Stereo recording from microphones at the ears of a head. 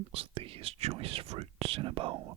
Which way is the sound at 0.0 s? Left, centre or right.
Right.